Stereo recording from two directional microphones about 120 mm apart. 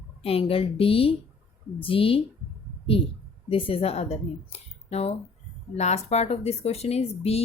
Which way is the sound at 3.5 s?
50° left (ahead or behind).